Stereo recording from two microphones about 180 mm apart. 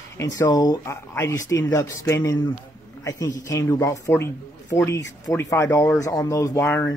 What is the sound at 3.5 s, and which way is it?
Speech, 15° left (ahead or behind).